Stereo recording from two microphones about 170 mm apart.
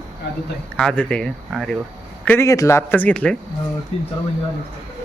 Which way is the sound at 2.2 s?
15° left (ahead or behind).